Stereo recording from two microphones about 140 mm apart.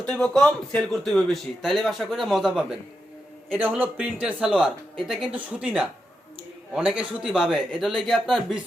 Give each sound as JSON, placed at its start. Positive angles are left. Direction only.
{"t": 0.1, "sound": "speech", "side_deg": 5}